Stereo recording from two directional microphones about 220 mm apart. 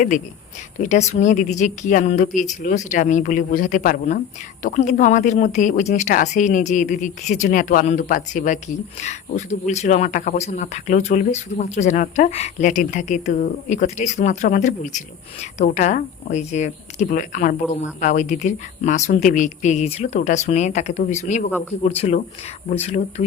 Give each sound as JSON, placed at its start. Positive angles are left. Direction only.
{"t": 0.8, "sound": "speech", "side_deg": 30}